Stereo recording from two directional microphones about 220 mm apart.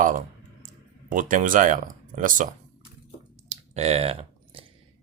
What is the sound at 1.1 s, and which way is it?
Speech, 35° right (ahead or behind).